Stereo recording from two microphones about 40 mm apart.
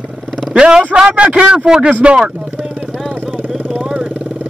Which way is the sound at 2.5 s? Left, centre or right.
Centre.